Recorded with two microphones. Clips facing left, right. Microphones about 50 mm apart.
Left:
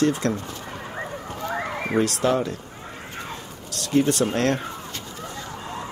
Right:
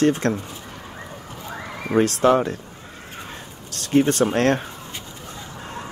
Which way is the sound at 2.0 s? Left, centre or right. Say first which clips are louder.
Right 5 dB; right.